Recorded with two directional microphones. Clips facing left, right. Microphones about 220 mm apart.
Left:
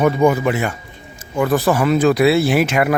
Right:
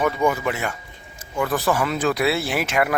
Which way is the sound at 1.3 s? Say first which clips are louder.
Left 6 dB; 30° left (ahead or behind).